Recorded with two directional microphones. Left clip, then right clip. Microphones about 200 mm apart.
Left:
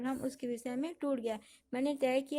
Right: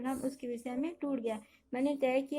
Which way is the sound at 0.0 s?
45° left (ahead or behind).